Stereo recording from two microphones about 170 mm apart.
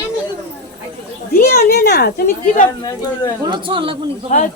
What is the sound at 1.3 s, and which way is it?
A woman's voice, 65° left (ahead or behind).